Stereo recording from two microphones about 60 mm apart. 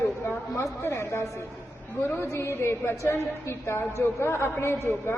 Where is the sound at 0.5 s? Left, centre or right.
Left.